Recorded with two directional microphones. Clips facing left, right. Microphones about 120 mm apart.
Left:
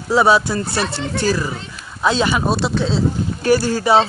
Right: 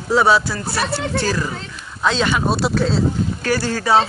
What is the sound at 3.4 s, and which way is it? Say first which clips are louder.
Speech: left 5 dB; 15° left (ahead or behind).